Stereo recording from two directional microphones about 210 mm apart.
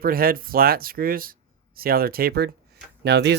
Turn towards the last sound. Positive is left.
turn(degrees=-55)  # may be behind; listen again after turning